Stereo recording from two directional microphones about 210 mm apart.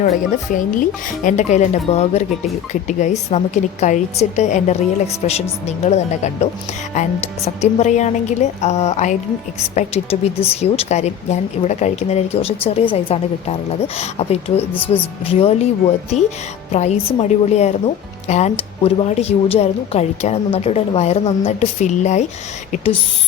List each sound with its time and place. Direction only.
0.5 s a woman's voice: 40° left (ahead or behind)
16.7 s a woman's voice: 30° left (ahead or behind)